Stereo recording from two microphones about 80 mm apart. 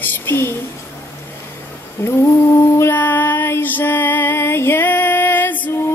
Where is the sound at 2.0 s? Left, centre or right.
Left.